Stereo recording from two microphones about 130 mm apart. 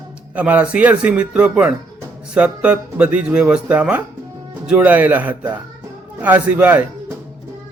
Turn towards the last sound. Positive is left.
turn(degrees=-15)  # may be behind; listen again after turning